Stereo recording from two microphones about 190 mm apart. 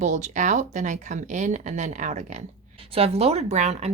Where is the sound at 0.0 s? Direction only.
40° right (ahead or behind).